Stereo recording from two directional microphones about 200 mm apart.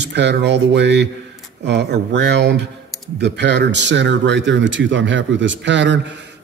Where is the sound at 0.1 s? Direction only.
60° right (ahead or behind).